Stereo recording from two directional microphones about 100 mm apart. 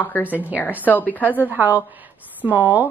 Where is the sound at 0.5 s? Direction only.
15° left (ahead or behind).